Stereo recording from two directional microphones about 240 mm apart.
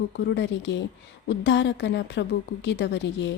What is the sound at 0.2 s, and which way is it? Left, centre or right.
A woman's voice, left.